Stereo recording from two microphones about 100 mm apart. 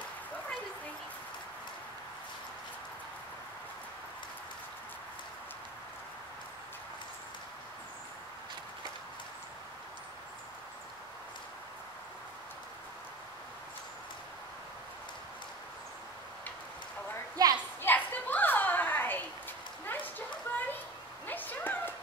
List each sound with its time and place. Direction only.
17.4 s children playing: 40° right (ahead or behind)
17.8 s a sound: 15° left (ahead or behind)
21.3 s dog: 15° left (ahead or behind)